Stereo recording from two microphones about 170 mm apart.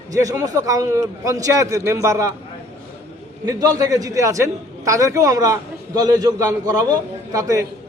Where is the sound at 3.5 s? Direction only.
20° right (ahead or behind).